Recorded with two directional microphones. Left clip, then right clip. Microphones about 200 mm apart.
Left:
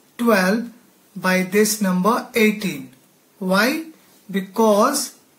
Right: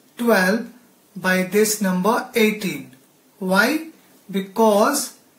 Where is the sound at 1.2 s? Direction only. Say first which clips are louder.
Even; 20° left (ahead or behind).